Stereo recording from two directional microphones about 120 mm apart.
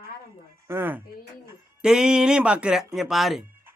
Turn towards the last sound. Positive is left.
turn(degrees=0)  # may be behind; listen again after turning